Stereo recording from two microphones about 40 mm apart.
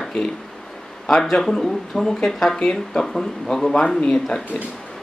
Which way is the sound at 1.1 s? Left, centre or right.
Centre.